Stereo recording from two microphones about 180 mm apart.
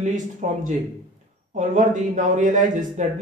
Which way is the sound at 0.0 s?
40° right (ahead or behind).